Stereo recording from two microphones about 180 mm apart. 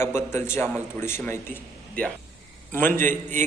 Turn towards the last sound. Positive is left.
turn(degrees=-45)  # may be behind; listen again after turning